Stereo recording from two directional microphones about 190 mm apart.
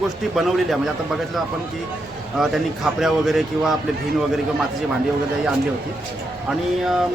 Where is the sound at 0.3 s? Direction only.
Centre (ahead or behind).